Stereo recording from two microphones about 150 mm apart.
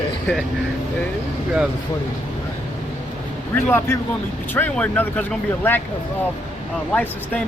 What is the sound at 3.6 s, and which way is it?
Speech, 15° left (ahead or behind).